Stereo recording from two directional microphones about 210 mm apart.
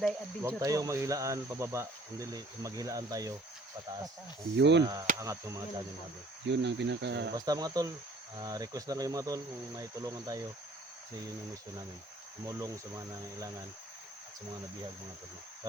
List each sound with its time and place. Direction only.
0.4 s speech: 15° right (ahead or behind)
4.5 s speech: 55° right (ahead or behind)
4.8 s speech: 15° right (ahead or behind)
6.5 s speech: 55° right (ahead or behind)
7.3 s speech: 20° right (ahead or behind)
12.5 s speech: 15° right (ahead or behind)